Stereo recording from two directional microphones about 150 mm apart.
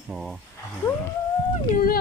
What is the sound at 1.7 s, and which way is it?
Speech, 75° left (ahead or behind).